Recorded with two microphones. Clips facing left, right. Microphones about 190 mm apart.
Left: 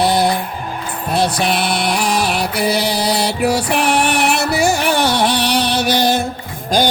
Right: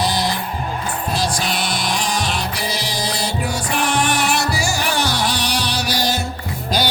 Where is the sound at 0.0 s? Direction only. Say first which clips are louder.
Left 6 dB; 60° left (ahead or behind).